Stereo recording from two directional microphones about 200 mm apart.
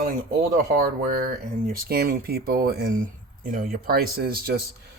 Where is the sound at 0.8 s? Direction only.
45° right (ahead or behind).